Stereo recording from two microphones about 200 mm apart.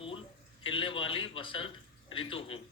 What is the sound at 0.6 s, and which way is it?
A man's voice, 25° left (ahead or behind).